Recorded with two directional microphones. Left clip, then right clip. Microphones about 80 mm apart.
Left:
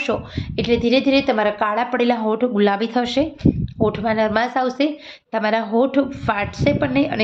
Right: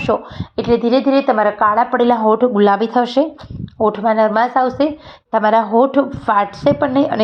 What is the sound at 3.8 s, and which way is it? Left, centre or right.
A woman's voice, centre.